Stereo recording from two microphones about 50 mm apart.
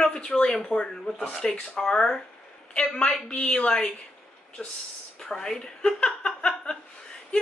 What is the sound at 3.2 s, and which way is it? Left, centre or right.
A woman's voice, left.